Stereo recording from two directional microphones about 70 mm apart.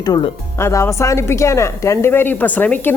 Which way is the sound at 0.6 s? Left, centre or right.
Left.